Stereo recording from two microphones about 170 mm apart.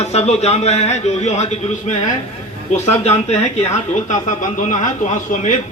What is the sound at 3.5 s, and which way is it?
Speech, 45° left (ahead or behind).